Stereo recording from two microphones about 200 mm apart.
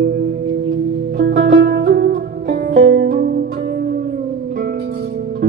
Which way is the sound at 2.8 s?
60° right (ahead or behind).